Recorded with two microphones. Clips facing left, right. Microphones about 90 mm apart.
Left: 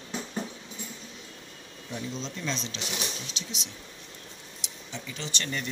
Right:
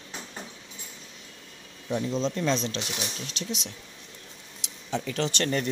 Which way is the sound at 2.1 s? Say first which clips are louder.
Right 8 dB; 50° right (ahead or behind).